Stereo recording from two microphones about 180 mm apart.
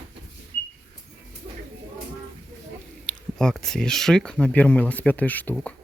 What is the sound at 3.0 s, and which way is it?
Speech, 5° left (ahead or behind).